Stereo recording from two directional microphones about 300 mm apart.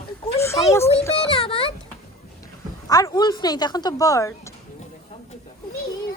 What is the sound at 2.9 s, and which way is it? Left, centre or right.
Speech, centre.